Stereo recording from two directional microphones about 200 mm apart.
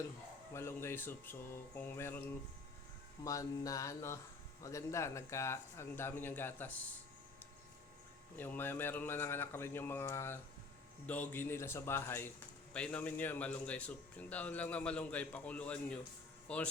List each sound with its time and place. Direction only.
0.5 s a man's voice: 10° left (ahead or behind)
3.2 s a man's voice: 15° left (ahead or behind)
8.4 s a man's voice: 10° left (ahead or behind)